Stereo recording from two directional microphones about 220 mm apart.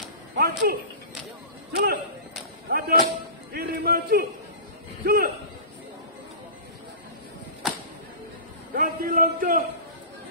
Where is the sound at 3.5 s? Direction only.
45° right (ahead or behind).